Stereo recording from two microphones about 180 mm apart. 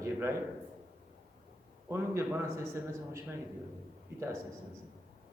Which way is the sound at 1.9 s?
15° right (ahead or behind).